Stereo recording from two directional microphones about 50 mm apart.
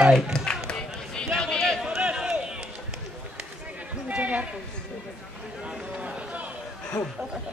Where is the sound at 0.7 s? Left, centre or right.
Centre.